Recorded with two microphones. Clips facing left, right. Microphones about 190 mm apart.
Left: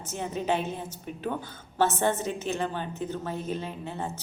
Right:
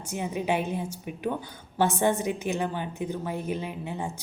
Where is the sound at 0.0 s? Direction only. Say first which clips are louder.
Right 1 dB; 10° right (ahead or behind).